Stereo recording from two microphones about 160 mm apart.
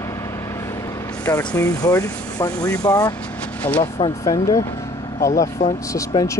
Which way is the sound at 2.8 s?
20° left (ahead or behind).